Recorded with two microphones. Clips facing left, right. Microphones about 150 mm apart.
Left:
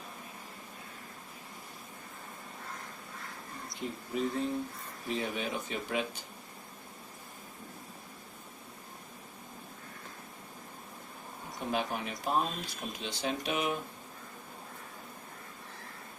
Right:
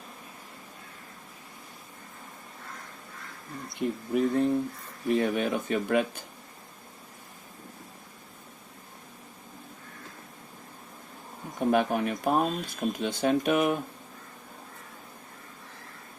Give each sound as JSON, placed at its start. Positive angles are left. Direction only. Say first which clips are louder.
{"t": 3.8, "sound": "speech", "louder": "right 8 dB", "side_deg": -60}
{"t": 11.7, "sound": "speech", "louder": "right 9 dB", "side_deg": -55}